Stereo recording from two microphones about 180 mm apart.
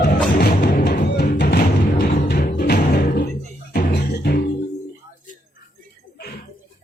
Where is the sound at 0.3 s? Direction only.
70° left (ahead or behind).